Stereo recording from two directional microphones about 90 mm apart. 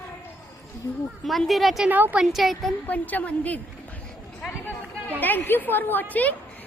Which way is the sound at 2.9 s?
15° left (ahead or behind).